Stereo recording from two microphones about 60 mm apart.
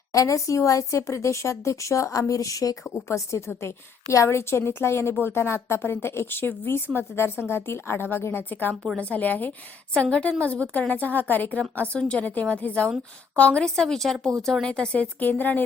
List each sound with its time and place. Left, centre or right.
0.1 s speech: left
2.9 s a woman's voice: left
9.0 s a woman's voice: left
13.7 s a woman's voice: centre
14.7 s a woman's voice: centre
15.2 s a woman's voice: left